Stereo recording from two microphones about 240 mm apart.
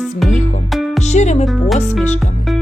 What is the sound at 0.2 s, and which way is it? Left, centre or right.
Music, centre.